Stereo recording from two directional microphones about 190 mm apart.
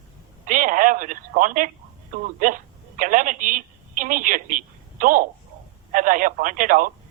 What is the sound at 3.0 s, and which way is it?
A woman's voice, 45° right (ahead or behind).